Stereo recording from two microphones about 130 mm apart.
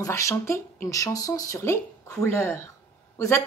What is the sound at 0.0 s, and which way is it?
A woman's voice, 25° left (ahead or behind).